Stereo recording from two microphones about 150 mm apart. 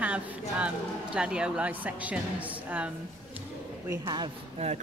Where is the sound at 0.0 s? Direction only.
10° right (ahead or behind).